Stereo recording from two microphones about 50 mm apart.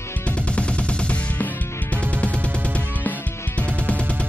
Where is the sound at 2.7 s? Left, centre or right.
Left.